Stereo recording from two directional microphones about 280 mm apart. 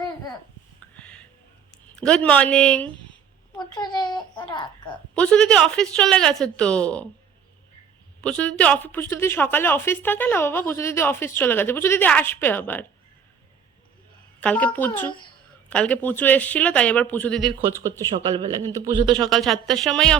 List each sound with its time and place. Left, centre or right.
0.9 s music: centre
2.0 s a woman's voice: centre
3.6 s a woman's voice: centre
5.1 s a woman's voice: centre
8.2 s a woman's voice: centre
14.4 s a woman's voice: centre
17.5 s speech: centre
19.3 s a woman's voice: centre